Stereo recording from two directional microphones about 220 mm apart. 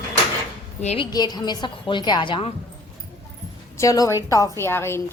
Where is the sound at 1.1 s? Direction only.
20° left (ahead or behind).